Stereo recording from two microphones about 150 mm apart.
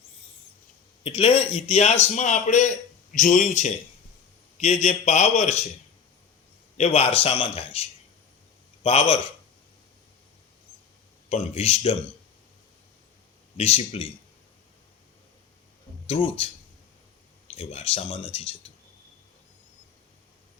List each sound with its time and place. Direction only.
1.0 s a man's voice: 35° left (ahead or behind)
6.7 s a man's voice: 45° left (ahead or behind)
11.3 s a man's voice: 45° left (ahead or behind)
13.6 s a man's voice: 40° left (ahead or behind)
16.0 s a man's voice: 40° left (ahead or behind)
17.5 s a man's voice: 45° left (ahead or behind)